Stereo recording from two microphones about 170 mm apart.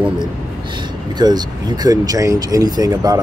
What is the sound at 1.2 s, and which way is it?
Speech, 25° right (ahead or behind).